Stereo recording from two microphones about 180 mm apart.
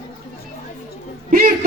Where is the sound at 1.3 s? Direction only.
55° right (ahead or behind).